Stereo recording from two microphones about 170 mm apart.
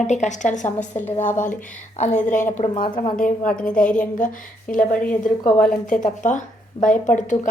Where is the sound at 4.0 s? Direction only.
50° left (ahead or behind).